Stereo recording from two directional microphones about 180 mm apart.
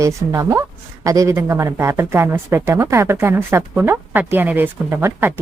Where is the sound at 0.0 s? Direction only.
15° right (ahead or behind).